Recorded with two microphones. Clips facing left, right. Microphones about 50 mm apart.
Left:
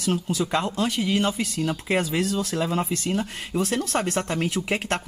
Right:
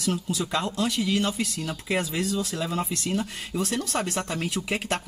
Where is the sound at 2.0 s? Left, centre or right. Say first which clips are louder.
Left 3 dB; left.